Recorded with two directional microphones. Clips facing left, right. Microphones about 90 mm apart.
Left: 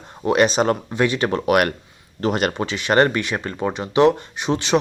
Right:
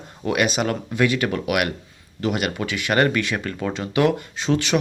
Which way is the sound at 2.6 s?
25° left (ahead or behind).